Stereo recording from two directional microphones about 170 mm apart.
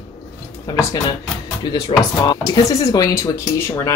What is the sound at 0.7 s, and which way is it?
Speech, 20° left (ahead or behind).